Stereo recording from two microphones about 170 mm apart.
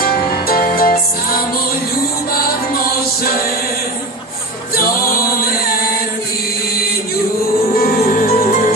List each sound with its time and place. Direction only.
0.0 s music: 60° left (ahead or behind)
7.8 s music: 60° left (ahead or behind)